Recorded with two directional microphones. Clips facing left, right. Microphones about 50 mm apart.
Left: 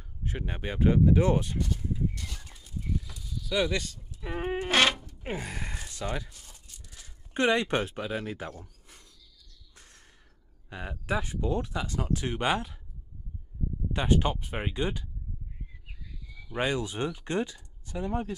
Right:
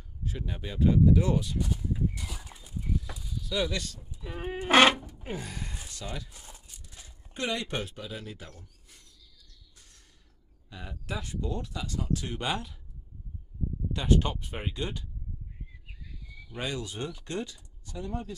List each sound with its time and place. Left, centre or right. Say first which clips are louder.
0.2 s speech: left 2 dB; left
2.1 s horse: right 1 dB; centre
3.4 s speech: left 3 dB; centre
4.2 s roaring cats: left 5 dB; left
4.6 s a sound: right 5 dB; centre
4.9 s zipper: right 6 dB; centre
5.2 s gasp: left 8 dB; left
6.0 s speech: left 6 dB; left
6.3 s tearing: right 3 dB; centre
7.3 s speech: left 7 dB; left
9.8 s a sound: left 7 dB; left
10.7 s speech: left 6 dB; left
13.9 s speech: left 1 dB; centre
16.5 s speech: left 5 dB; left